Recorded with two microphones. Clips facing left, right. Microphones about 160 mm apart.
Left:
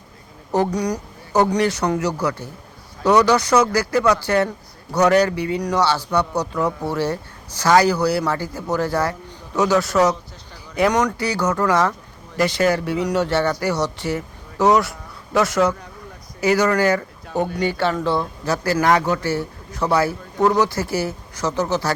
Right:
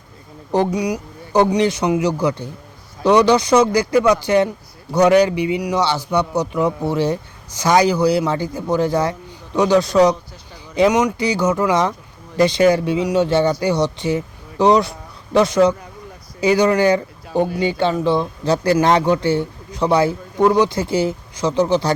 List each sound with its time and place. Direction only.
0.5 s speech: 10° right (ahead or behind)